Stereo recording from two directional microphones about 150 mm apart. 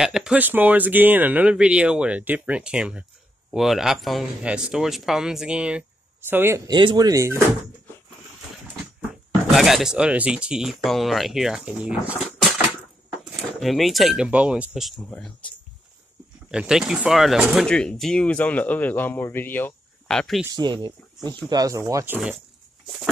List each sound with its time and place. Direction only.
0.0 s speech: 5° right (ahead or behind); by 7.4 s 20° right (ahead or behind)
9.5 s speech: centre (ahead or behind)
16.4 s speech: 5° right (ahead or behind)
20.5 s speech: 30° right (ahead or behind)